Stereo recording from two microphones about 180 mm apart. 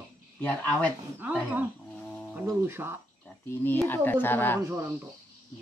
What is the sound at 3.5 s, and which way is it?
Speech, 10° left (ahead or behind).